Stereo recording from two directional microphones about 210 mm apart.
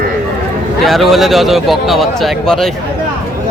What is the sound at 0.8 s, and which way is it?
A man's voice, centre (ahead or behind).